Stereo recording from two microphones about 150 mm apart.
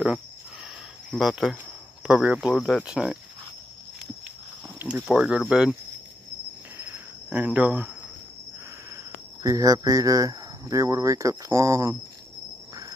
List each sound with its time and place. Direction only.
1.1 s speech: centre (ahead or behind)
4.7 s speech: 15° right (ahead or behind)
6.8 s cricket: 10° right (ahead or behind)
8.9 s speech: 20° right (ahead or behind)